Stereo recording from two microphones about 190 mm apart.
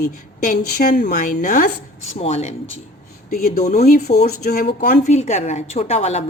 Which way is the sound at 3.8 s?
35° left (ahead or behind).